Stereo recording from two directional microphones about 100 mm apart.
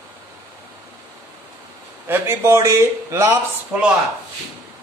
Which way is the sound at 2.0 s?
25° right (ahead or behind).